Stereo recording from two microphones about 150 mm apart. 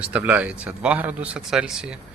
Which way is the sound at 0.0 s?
10° right (ahead or behind).